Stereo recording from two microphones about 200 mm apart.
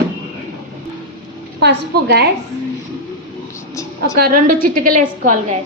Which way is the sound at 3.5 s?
15° left (ahead or behind).